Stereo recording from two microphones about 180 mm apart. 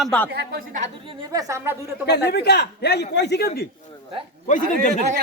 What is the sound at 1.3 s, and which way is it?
Speech, 20° right (ahead or behind).